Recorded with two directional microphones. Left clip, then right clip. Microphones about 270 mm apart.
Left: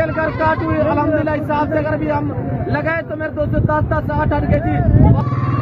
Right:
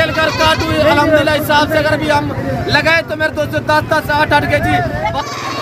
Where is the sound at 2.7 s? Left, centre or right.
Centre.